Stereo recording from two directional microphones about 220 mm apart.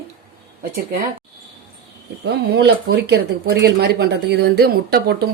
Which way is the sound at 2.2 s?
50° right (ahead or behind).